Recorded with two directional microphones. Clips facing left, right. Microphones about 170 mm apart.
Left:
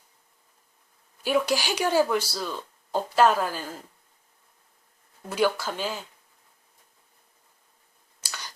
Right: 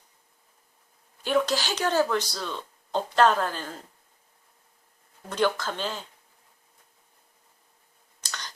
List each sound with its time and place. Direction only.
1.2 s speech: 10° left (ahead or behind)
5.3 s speech: 10° left (ahead or behind)
8.2 s clicking: 10° left (ahead or behind)